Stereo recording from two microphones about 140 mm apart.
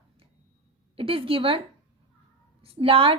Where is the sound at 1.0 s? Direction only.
40° right (ahead or behind).